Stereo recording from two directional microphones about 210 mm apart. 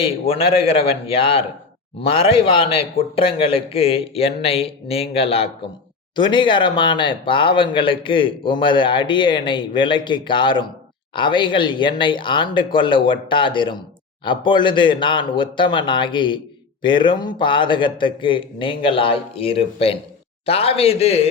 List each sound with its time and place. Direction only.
0.0 s speech: 25° left (ahead or behind)